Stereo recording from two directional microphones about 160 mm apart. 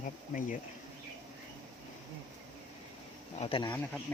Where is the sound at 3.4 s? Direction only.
30° left (ahead or behind).